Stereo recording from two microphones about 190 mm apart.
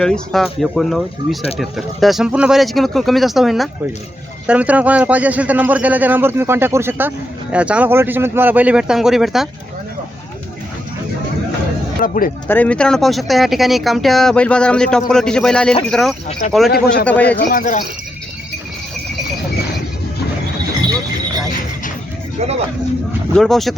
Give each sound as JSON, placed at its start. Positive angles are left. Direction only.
{"t": 0.0, "sound": "speech", "side_deg": 5}
{"t": 12.0, "sound": "speech", "side_deg": 50}
{"t": 12.5, "sound": "speech", "side_deg": 5}
{"t": 16.7, "sound": "a man's voice", "side_deg": 60}
{"t": 17.1, "sound": "speech", "side_deg": 10}
{"t": 17.5, "sound": "speech", "side_deg": 40}
{"t": 23.3, "sound": "speech", "side_deg": 0}